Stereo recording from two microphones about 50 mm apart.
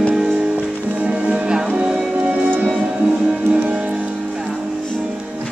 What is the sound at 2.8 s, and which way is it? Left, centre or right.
Music, centre.